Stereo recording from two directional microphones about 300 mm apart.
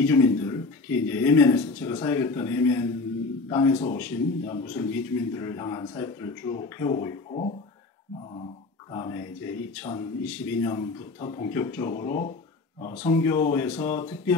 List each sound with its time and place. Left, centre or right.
0.0 s a man's voice: centre
8.9 s a man's voice: centre
10.2 s a man's voice: centre